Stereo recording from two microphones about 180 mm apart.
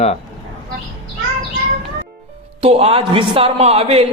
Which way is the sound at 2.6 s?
35° right (ahead or behind).